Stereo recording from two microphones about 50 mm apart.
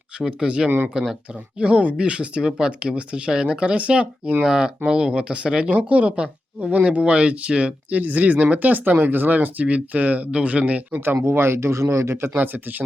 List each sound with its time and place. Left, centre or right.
0.2 s speech: centre
4.4 s speech: centre; by 11.0 s right
11.2 s speech: right
12.3 s speech: right